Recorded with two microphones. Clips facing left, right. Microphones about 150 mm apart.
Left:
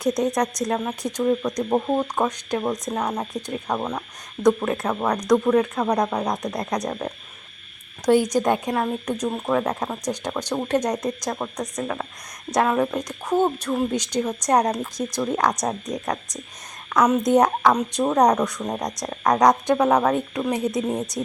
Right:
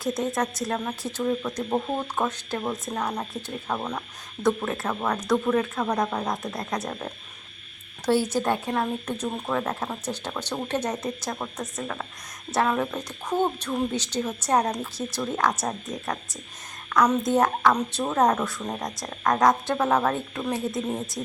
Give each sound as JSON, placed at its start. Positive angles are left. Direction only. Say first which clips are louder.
{"t": 0.0, "sound": "speech", "louder": "left 5 dB", "side_deg": 15}